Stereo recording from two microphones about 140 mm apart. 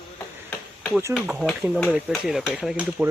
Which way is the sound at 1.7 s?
Centre (ahead or behind).